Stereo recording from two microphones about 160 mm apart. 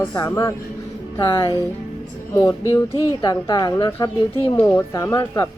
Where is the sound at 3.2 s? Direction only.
25° left (ahead or behind).